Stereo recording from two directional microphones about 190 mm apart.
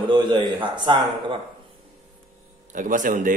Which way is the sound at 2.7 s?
45° right (ahead or behind).